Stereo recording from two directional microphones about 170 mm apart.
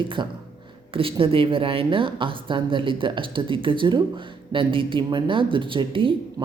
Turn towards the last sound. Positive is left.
turn(degrees=-30)  # may be behind; listen again after turning